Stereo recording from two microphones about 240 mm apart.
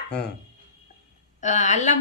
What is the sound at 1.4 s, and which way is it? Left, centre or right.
Speech, left.